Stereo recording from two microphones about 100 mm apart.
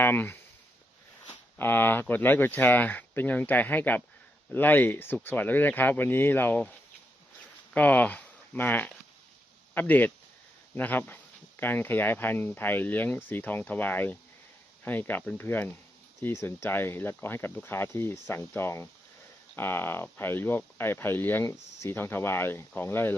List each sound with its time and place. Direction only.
0.0 s speech: 20° left (ahead or behind)
1.5 s speech: 20° left (ahead or behind)